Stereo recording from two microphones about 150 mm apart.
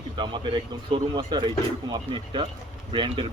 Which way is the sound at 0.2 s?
30° right (ahead or behind).